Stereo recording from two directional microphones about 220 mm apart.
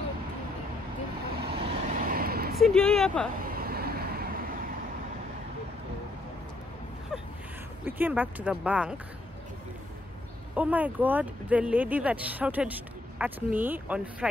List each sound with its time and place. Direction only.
1.5 s vehicle: 25° right (ahead or behind)
2.0 s vehicle: 40° right (ahead or behind)
2.6 s speech: 5° left (ahead or behind)
3.3 s vehicle: 45° right (ahead or behind)
7.8 s speech: 10° right (ahead or behind)
10.5 s speech: 5° right (ahead or behind)